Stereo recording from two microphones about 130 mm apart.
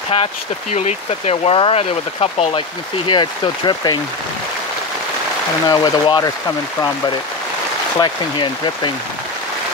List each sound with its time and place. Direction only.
0.1 s speech: 55° left (ahead or behind)
3.1 s speech: 35° left (ahead or behind)
5.7 s speech: 35° left (ahead or behind)
8.0 s speech: 35° left (ahead or behind)